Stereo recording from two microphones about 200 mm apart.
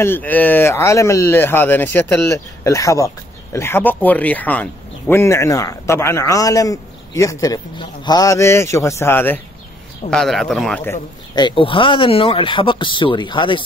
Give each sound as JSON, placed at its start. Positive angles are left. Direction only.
{"t": 0.0, "sound": "speech", "side_deg": 10}
{"t": 10.9, "sound": "speech", "side_deg": 20}